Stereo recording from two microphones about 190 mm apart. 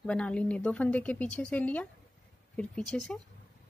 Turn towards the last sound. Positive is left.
turn(degrees=5)  # may be behind; listen again after turning